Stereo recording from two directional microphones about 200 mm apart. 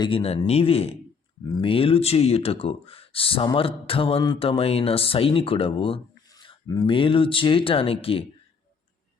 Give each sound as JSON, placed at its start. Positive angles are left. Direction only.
{"t": 0.0, "sound": "speech", "side_deg": 30}